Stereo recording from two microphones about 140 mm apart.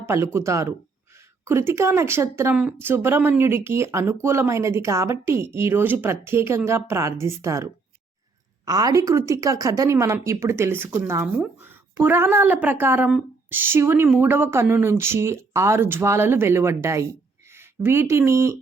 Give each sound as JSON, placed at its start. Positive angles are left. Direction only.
{"t": 0.0, "sound": "speech", "side_deg": -15}